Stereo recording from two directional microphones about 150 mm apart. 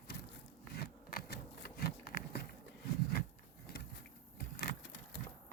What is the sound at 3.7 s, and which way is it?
Vehicle, 90° left.